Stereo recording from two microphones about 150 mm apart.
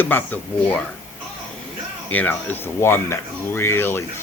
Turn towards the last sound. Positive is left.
turn(degrees=15)  # may be behind; listen again after turning